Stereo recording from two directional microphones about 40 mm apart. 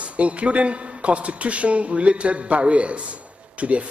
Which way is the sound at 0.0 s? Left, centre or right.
Right.